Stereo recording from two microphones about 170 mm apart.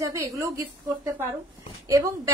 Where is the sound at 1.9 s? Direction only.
20° right (ahead or behind).